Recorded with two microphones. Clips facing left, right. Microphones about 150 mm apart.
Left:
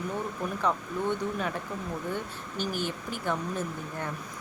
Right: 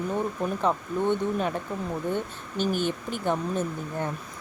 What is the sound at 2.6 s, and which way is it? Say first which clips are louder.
Speech: right 6 dB; 20° right (ahead or behind).